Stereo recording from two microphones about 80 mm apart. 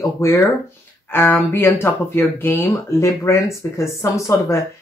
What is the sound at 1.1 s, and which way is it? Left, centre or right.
Speech, left.